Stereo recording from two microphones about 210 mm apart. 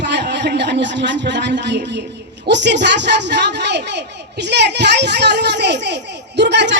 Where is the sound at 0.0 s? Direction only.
55° right (ahead or behind).